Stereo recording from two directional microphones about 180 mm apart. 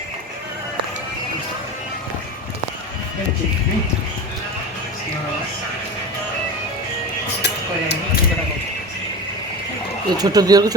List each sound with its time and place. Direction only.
7.4 s music: 70° left (ahead or behind)
10.1 s speech: 20° right (ahead or behind)